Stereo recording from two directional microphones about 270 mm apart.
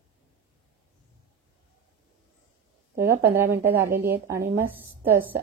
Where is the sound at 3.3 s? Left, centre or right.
Centre.